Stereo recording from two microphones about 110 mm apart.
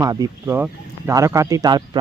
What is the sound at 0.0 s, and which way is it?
Speech, 30° right (ahead or behind).